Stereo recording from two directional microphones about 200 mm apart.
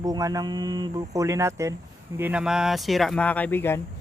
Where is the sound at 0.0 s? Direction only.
20° right (ahead or behind); by 3.8 s 10° left (ahead or behind).